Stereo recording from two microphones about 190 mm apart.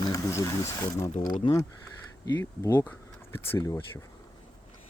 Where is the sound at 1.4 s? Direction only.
25° left (ahead or behind).